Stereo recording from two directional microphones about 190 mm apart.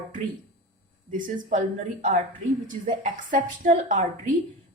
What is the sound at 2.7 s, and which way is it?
A woman's voice, 45° right (ahead or behind).